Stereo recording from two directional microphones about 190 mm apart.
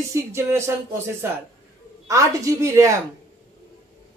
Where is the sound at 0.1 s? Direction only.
15° right (ahead or behind).